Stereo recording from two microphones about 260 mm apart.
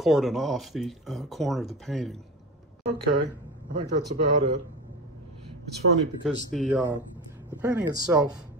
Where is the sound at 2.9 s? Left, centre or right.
Right.